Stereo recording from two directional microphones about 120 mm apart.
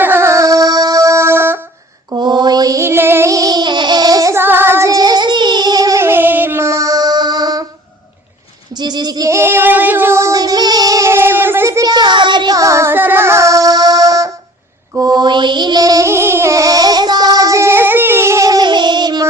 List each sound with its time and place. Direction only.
0.0 s music: 20° right (ahead or behind)
2.0 s child singing: 40° right (ahead or behind)
8.7 s female singing: 35° right (ahead or behind)
11.9 s child singing: 40° right (ahead or behind)
14.9 s music: 35° right (ahead or behind)